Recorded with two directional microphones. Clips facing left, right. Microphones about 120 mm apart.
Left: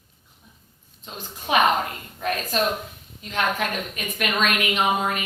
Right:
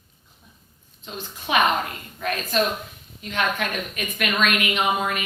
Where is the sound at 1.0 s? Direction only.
40° left (ahead or behind).